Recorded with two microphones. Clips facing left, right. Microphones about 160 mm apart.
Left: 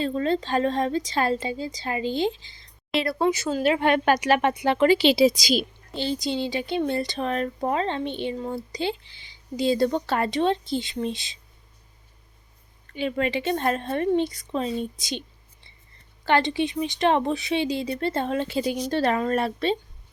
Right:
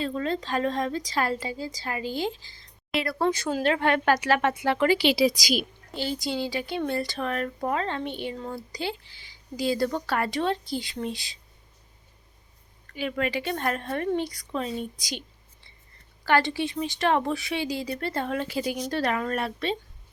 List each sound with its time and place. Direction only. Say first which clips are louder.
0.0 s a woman's voice: left 4 dB; 30° left (ahead or behind)
3.2 s a woman's voice: left 2 dB; 10° left (ahead or behind)
12.9 s a woman's voice: left 3 dB; 25° left (ahead or behind)
16.2 s a woman's voice: left 2 dB; 20° left (ahead or behind)